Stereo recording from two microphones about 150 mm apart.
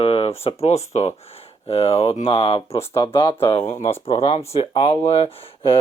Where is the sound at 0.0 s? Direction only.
40° left (ahead or behind).